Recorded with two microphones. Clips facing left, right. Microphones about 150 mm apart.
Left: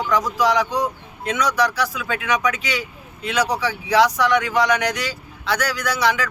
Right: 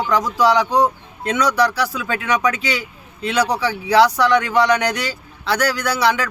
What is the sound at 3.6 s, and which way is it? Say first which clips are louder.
Speech: right 4 dB; 30° right (ahead or behind).